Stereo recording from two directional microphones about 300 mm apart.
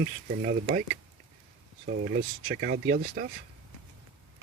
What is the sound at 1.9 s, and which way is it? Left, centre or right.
Speech, right.